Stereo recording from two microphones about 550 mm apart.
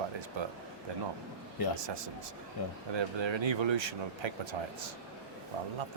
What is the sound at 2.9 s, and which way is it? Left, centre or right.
Speech, right.